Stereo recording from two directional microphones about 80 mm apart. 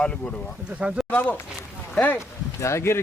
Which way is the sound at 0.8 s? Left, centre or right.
Centre.